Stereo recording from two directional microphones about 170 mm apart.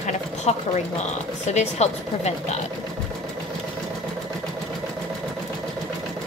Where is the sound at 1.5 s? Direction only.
40° left (ahead or behind).